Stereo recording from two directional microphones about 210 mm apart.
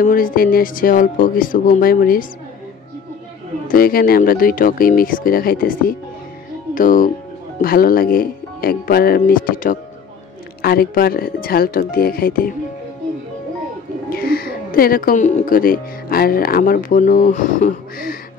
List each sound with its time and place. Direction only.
0.0 s speech: 40° left (ahead or behind)
3.6 s speech: 45° left (ahead or behind)
14.1 s speech: 45° left (ahead or behind)